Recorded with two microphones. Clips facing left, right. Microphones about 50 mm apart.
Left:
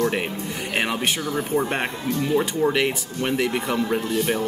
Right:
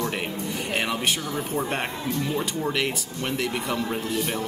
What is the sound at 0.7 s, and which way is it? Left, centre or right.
Speech, centre.